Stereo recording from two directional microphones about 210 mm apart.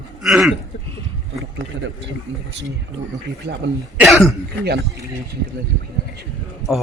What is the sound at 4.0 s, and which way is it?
Speech, centre (ahead or behind).